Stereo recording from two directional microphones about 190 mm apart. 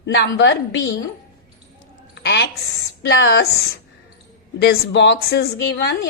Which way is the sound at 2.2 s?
60° left (ahead or behind).